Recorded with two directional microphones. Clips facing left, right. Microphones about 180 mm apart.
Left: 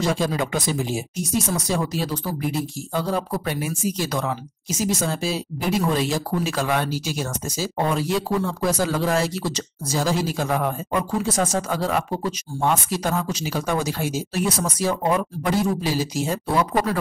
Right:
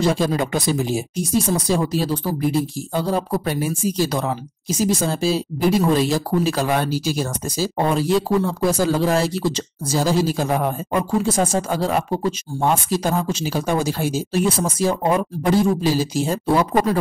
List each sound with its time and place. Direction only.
0.0 s speech: 35° right (ahead or behind)